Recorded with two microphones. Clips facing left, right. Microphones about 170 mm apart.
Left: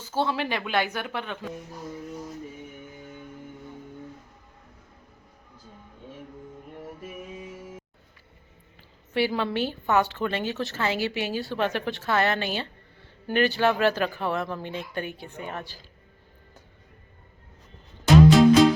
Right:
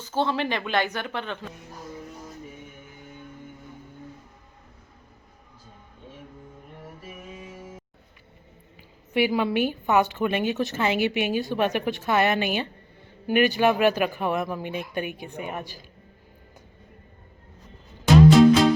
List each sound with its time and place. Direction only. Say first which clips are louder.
0.0 s a woman's voice: right 2 dB; 10° left (ahead or behind)
9.1 s a woman's voice: right 3 dB; 15° right (ahead or behind)
18.0 s music: right 1 dB; centre (ahead or behind)